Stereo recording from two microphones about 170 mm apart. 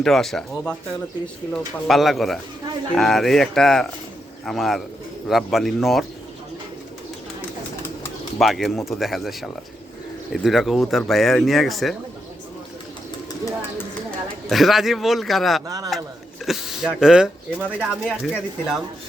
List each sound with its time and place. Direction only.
0.0 s speech: centre (ahead or behind)
8.4 s speech: centre (ahead or behind)
14.5 s speech: centre (ahead or behind)
15.6 s a man's voice: 20° right (ahead or behind)
16.5 s speech: centre (ahead or behind)